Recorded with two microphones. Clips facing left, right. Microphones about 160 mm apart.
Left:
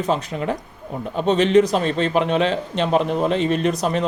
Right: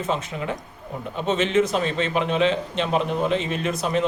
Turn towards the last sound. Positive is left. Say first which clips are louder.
# left 3 dB
turn(degrees=35)  # may be behind; listen again after turning